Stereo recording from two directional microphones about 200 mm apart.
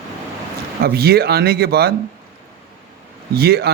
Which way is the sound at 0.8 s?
50° right (ahead or behind).